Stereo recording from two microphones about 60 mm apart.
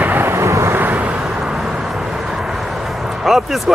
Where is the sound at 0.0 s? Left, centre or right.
Right.